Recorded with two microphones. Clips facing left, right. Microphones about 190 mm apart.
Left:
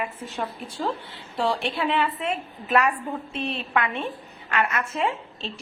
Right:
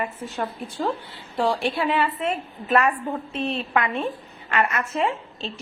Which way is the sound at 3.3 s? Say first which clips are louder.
Right 4 dB; 35° right (ahead or behind).